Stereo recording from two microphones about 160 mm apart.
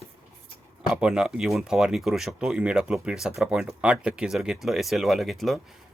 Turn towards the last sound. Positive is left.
turn(degrees=0)  # may be behind; listen again after turning